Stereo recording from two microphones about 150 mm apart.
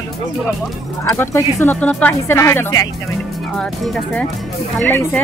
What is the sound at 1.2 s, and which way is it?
Speech, 15° left (ahead or behind).